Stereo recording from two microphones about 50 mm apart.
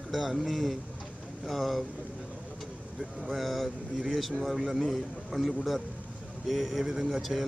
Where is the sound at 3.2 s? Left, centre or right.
Centre.